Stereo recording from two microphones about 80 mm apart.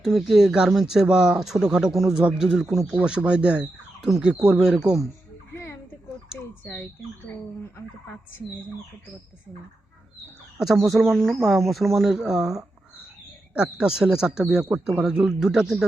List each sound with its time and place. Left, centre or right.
0.0 s speech: centre
2.9 s speech: centre
6.4 s speech: left
10.6 s speech: centre